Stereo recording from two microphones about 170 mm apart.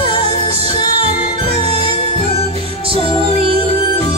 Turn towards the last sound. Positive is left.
turn(degrees=-35)  # may be behind; listen again after turning